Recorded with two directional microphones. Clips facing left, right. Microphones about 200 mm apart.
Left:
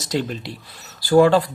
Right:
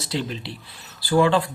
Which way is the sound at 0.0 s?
45° left (ahead or behind).